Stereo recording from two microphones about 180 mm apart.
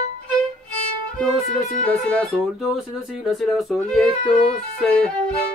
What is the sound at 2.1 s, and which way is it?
Music, 5° left (ahead or behind).